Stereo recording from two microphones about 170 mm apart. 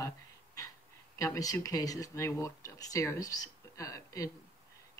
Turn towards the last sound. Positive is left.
turn(degrees=20)  # may be behind; listen again after turning